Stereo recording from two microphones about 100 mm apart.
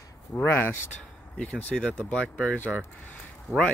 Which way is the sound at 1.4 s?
10° left (ahead or behind).